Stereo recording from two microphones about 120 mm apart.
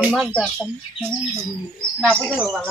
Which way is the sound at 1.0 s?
20° right (ahead or behind).